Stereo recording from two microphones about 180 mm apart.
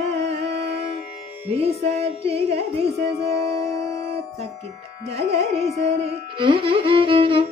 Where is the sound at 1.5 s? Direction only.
35° right (ahead or behind).